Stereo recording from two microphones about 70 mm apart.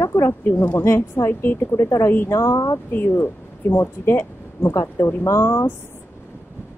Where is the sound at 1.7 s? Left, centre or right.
Left.